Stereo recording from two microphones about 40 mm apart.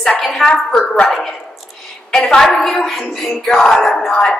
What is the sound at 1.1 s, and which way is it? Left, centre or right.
Speech, centre.